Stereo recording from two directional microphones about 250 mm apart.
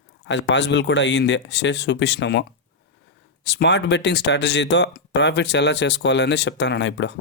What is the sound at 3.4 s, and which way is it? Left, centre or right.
Speech, left.